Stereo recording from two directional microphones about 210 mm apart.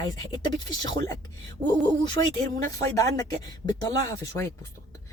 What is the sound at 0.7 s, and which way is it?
Speech, 20° left (ahead or behind).